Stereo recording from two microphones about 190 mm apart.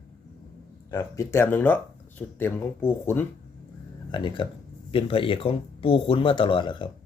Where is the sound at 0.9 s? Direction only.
15° left (ahead or behind).